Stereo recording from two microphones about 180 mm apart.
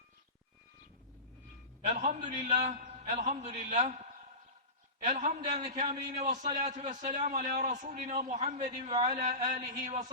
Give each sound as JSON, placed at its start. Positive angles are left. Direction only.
{"t": 1.8, "sound": "a man's voice", "side_deg": -40}
{"t": 5.0, "sound": "a man's voice", "side_deg": -45}
{"t": 5.9, "sound": "a man's voice", "side_deg": -20}
{"t": 6.1, "sound": "a man's voice", "side_deg": -45}